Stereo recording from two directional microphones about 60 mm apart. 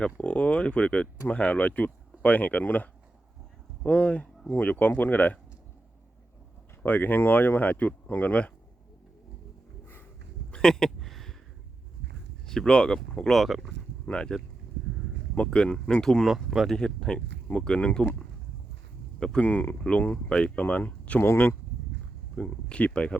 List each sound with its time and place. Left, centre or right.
0.2 s speech: left
6.8 s speech: left
10.5 s a sound: centre
12.5 s speech: centre
15.4 s speech: centre
16.2 s speech: centre
16.6 s speech: centre
19.4 s speech: left
21.2 s speech: left
22.4 s speech: left